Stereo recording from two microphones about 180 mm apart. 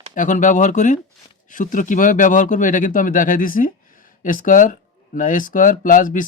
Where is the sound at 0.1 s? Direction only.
45° left (ahead or behind).